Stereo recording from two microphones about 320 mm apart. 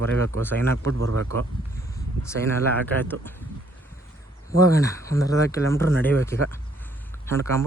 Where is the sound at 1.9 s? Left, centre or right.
Centre.